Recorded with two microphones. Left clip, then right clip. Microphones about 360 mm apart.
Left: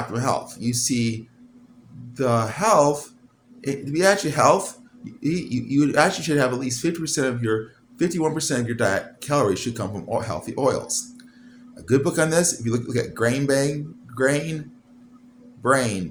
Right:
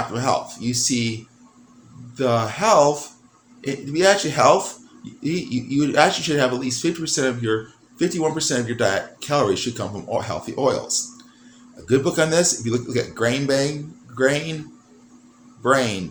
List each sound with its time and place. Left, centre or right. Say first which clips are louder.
0.1 s speech: right 3 dB; left
2.1 s speech: right 2 dB; left
15.6 s speech: right 2 dB; left